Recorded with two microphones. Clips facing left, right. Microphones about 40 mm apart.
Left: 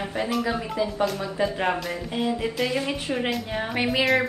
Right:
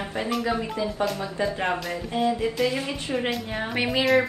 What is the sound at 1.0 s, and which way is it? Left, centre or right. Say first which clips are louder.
A woman's voice: left 1 dB; centre.